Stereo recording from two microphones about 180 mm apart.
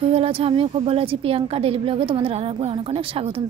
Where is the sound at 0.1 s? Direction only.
35° right (ahead or behind).